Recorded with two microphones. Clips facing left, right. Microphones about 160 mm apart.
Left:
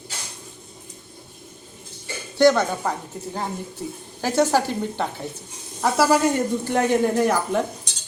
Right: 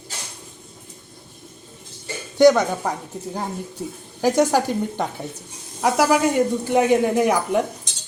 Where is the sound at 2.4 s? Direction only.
15° right (ahead or behind).